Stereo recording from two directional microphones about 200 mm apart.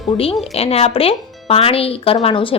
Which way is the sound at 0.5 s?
30° left (ahead or behind).